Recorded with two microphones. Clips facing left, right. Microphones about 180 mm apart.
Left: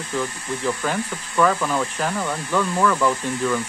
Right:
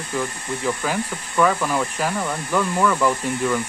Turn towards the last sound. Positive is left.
turn(degrees=-5)  # may be behind; listen again after turning